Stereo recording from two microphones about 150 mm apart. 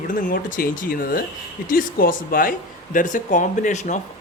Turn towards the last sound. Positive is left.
turn(degrees=55)  # may be behind; listen again after turning